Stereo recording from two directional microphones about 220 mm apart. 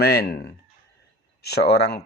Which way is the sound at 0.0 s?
45° left (ahead or behind).